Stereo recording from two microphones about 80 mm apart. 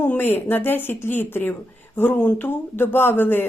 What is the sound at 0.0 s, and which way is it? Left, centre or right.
Speech, left.